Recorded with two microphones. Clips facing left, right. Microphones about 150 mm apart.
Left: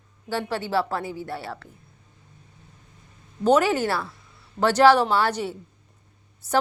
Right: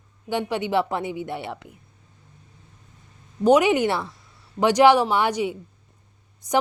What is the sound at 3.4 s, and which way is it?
A woman's voice, 15° right (ahead or behind).